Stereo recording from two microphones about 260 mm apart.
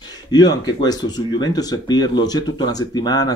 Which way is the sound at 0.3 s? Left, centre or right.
Centre.